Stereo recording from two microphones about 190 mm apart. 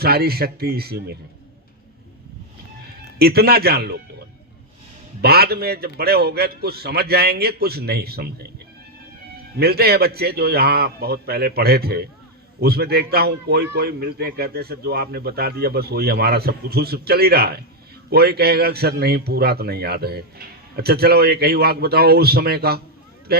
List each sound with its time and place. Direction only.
0.0 s a man's voice: 55° right (ahead or behind)
3.2 s a man's voice: 55° right (ahead or behind)
5.2 s a man's voice: 55° right (ahead or behind)
9.6 s a man's voice: 55° right (ahead or behind)